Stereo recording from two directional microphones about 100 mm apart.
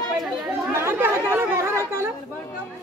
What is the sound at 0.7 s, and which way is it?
Chatter, 25° right (ahead or behind).